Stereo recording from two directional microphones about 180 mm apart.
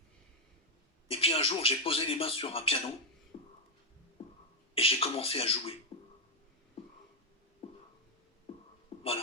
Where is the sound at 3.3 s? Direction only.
25° left (ahead or behind).